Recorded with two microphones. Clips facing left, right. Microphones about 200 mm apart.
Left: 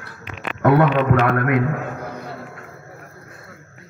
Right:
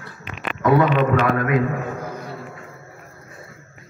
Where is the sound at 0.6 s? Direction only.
60° left (ahead or behind).